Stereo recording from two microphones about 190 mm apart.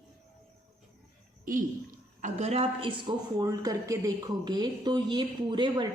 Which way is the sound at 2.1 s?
40° right (ahead or behind).